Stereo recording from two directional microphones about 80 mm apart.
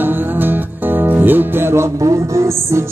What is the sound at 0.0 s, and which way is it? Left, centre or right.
Music, right.